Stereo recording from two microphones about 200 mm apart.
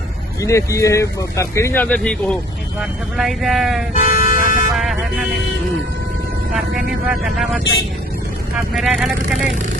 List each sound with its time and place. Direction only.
0.4 s speech: 15° left (ahead or behind); by 3.8 s centre (ahead or behind)
3.9 s vehicle: 45° left (ahead or behind)
4.7 s speech: centre (ahead or behind)
7.3 s speech: centre (ahead or behind)